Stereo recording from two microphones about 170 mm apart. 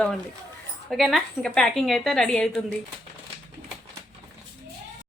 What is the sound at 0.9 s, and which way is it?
A woman's voice, centre (ahead or behind).